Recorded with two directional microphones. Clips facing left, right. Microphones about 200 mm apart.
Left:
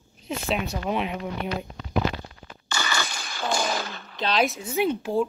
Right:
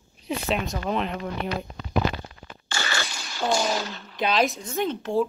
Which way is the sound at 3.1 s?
55° left (ahead or behind).